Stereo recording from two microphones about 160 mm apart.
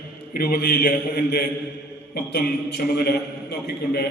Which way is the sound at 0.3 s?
80° left.